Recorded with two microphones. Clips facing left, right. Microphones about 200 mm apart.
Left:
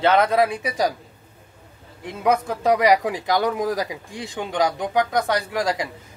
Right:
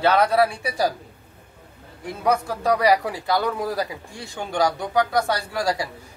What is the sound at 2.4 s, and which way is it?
A man's voice, 20° left (ahead or behind).